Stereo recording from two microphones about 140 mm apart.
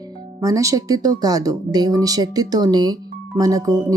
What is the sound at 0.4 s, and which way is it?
Speech, 25° right (ahead or behind).